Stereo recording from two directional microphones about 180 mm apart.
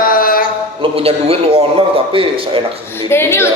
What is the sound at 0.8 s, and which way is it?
A man's voice, 35° right (ahead or behind).